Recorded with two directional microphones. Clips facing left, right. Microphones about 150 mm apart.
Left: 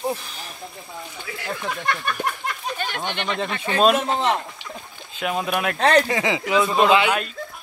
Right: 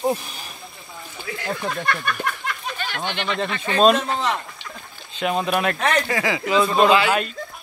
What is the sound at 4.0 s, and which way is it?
Speech, 25° left (ahead or behind).